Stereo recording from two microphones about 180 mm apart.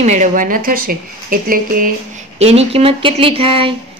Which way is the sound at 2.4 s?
35° right (ahead or behind).